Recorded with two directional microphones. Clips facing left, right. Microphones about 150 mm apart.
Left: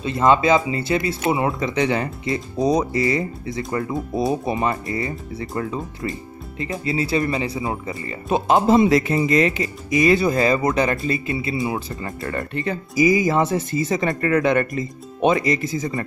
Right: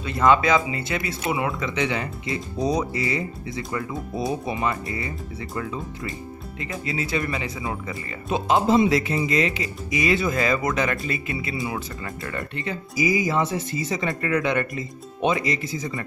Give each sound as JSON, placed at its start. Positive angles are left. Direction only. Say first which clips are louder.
{"t": 0.0, "sound": "speech", "louder": "left 2 dB", "side_deg": 25}
{"t": 8.3, "sound": "speech", "louder": "left 4 dB", "side_deg": 50}
{"t": 12.2, "sound": "speech", "louder": "left 6 dB", "side_deg": 45}